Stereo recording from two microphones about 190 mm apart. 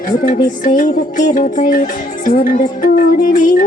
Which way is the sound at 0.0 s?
45° left (ahead or behind).